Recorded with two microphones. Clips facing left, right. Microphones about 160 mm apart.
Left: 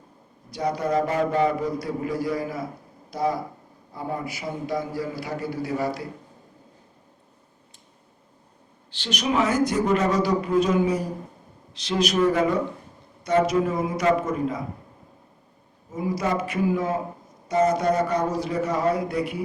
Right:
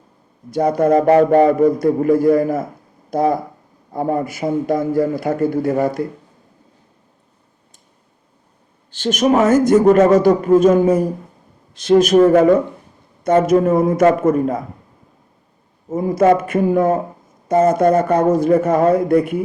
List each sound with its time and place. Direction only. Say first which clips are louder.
0.5 s a man's voice: right 10 dB; 50° right (ahead or behind)
8.9 s a man's voice: right 11 dB; 45° right (ahead or behind)
15.9 s a man's voice: right 12 dB; 50° right (ahead or behind)